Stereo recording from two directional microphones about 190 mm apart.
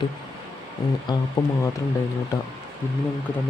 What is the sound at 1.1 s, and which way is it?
Speech, 25° left (ahead or behind).